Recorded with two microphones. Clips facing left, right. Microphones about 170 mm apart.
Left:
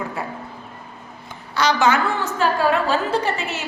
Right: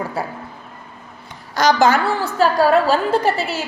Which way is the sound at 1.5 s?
40° right (ahead or behind).